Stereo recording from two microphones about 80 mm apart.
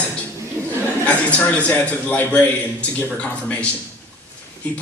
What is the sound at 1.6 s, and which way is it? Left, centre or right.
Speech, centre.